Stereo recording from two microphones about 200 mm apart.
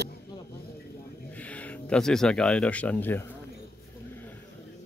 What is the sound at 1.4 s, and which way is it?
Speech, 5° left (ahead or behind).